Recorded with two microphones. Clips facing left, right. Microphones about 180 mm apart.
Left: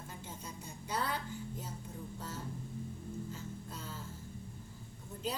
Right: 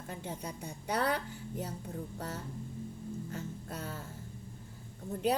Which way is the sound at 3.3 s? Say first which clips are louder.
Right 5 dB; 65° right (ahead or behind).